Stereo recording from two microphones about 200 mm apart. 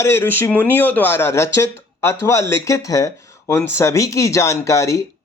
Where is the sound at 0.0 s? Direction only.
10° left (ahead or behind).